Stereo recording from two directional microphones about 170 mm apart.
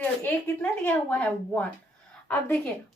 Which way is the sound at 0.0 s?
10° left (ahead or behind).